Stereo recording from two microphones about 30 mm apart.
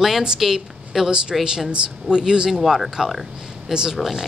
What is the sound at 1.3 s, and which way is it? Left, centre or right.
Speech, centre.